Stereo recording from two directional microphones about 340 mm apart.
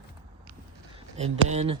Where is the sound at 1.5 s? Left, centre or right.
Centre.